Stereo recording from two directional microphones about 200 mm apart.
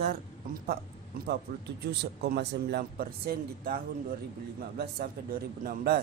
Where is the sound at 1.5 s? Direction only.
40° right (ahead or behind).